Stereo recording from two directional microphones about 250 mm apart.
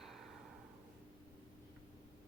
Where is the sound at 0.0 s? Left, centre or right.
Centre.